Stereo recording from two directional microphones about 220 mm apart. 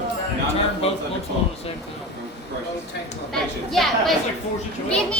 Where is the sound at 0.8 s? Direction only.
25° left (ahead or behind).